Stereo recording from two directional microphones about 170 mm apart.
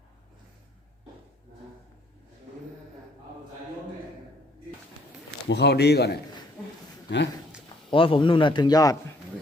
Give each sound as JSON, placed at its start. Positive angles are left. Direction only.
{"t": 5.5, "sound": "a man's voice", "side_deg": 85}
{"t": 7.1, "sound": "speech", "side_deg": 90}
{"t": 7.9, "sound": "a man's voice", "side_deg": 30}